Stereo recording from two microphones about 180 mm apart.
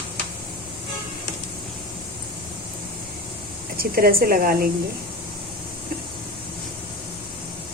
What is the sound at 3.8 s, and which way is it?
Speech, 55° right (ahead or behind).